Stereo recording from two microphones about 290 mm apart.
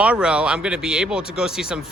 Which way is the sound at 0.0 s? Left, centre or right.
Centre.